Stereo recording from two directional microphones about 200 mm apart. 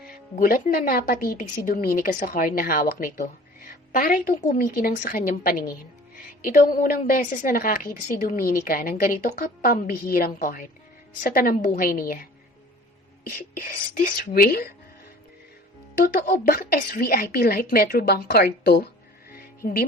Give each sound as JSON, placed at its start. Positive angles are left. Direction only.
{"t": 0.3, "sound": "a woman's voice", "side_deg": 45}
{"t": 16.0, "sound": "a woman's voice", "side_deg": 45}